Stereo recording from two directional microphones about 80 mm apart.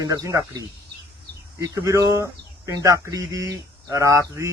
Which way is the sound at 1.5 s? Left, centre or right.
Right.